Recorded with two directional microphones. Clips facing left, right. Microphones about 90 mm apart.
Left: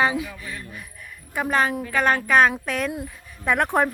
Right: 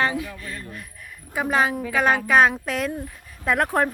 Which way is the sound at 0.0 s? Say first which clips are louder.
Left 2 dB; 15° left (ahead or behind).